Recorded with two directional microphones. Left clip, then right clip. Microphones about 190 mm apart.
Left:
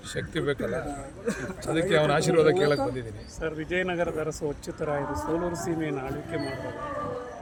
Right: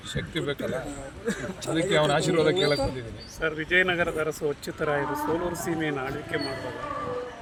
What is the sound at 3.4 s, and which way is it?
Speech, 45° right (ahead or behind).